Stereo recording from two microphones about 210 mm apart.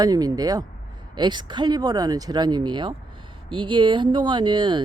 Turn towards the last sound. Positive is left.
turn(degrees=-20)  # may be behind; listen again after turning